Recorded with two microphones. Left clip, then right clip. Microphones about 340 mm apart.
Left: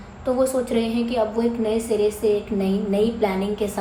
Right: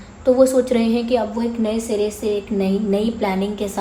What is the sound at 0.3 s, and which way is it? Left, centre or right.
A woman's voice, right.